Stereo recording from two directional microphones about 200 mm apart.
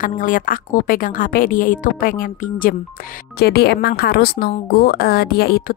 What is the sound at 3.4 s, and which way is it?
A woman's voice, 55° left (ahead or behind).